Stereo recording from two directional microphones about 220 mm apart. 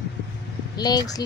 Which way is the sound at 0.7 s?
20° left (ahead or behind).